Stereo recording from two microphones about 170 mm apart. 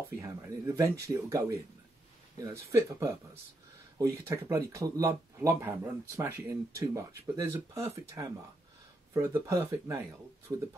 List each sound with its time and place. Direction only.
0.2 s speech: 15° right (ahead or behind)
2.7 s speech: 20° right (ahead or behind)